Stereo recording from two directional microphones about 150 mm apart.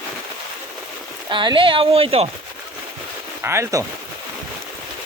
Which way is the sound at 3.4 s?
20° right (ahead or behind).